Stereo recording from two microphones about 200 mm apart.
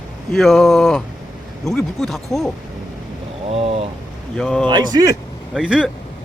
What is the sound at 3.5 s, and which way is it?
Vehicle, 30° right (ahead or behind).